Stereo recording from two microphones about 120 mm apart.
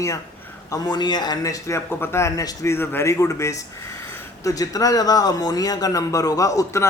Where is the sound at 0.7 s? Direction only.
35° left (ahead or behind).